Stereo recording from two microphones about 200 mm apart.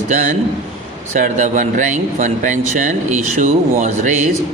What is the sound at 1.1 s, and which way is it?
Speech, 35° right (ahead or behind).